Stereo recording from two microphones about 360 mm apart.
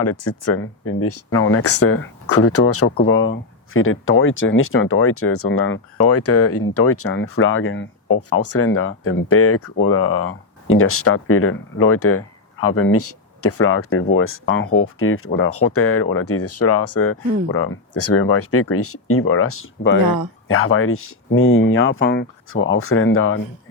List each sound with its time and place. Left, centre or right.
0.0 s speech: left